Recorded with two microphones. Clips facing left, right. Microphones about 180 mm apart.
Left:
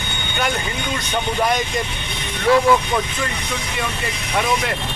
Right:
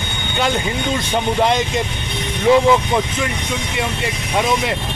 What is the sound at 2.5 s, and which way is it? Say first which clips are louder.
Speech: right 3 dB; 20° right (ahead or behind).